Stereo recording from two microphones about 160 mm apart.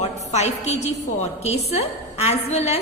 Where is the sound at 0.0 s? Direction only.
45° left (ahead or behind).